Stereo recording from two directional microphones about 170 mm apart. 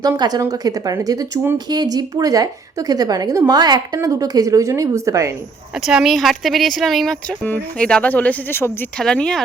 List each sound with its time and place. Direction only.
0.0 s speech: 20° right (ahead or behind)
5.7 s speech: 5° right (ahead or behind)